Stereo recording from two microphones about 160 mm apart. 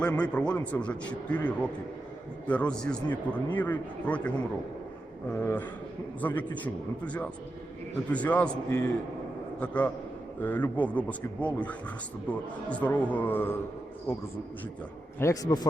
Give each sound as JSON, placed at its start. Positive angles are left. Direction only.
{"t": 0.0, "sound": "a man's voice", "side_deg": 5}
{"t": 15.2, "sound": "a man's voice", "side_deg": 20}